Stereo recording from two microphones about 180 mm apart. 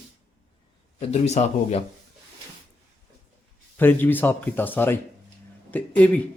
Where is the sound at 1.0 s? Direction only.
35° left (ahead or behind).